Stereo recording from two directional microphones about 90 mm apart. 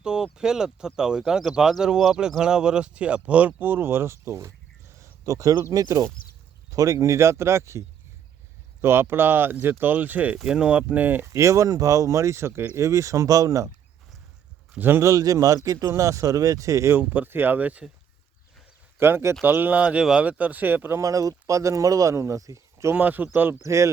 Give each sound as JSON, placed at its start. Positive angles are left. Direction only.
{"t": 0.0, "sound": "a man's voice", "side_deg": -10}
{"t": 11.3, "sound": "a man's voice", "side_deg": -35}
{"t": 14.7, "sound": "a man's voice", "side_deg": -20}
{"t": 17.0, "sound": "speech", "side_deg": -20}
{"t": 18.9, "sound": "speech", "side_deg": -25}
{"t": 21.0, "sound": "a man's voice", "side_deg": -40}
{"t": 23.0, "sound": "speech", "side_deg": -20}
{"t": 23.6, "sound": "a man's voice", "side_deg": -35}